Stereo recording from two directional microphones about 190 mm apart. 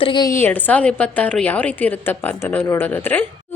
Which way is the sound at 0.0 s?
25° left (ahead or behind).